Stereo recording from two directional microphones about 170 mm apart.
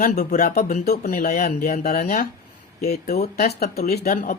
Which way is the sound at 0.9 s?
55° left (ahead or behind).